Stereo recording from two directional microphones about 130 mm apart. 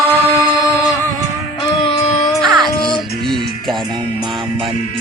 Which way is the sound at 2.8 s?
35° left (ahead or behind).